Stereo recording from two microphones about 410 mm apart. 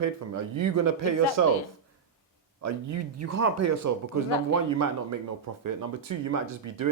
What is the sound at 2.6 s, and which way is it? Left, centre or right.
Speech, right.